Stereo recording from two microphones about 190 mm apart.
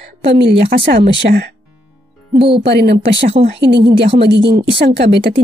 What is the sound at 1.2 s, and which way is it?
Speech, 60° right (ahead or behind).